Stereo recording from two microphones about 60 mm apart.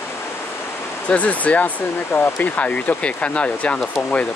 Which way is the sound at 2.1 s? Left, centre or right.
Left.